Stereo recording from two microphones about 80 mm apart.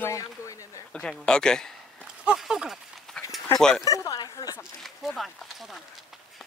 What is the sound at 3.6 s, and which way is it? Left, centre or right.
Speech, centre.